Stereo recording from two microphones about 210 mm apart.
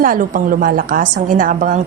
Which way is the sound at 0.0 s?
40° right (ahead or behind).